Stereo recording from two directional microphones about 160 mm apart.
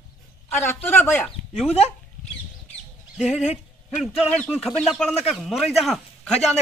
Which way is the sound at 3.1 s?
5° right (ahead or behind).